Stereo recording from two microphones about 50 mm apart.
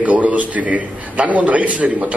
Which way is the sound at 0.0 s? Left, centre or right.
Right.